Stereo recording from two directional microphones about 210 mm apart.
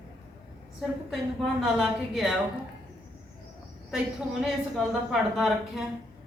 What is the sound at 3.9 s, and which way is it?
A woman's voice, centre (ahead or behind).